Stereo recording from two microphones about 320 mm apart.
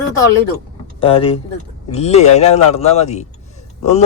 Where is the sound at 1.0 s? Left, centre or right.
Centre.